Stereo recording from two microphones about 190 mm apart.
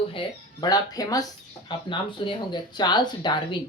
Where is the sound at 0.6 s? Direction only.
20° left (ahead or behind).